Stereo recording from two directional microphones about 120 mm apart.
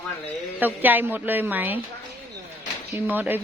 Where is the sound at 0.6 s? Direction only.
15° right (ahead or behind).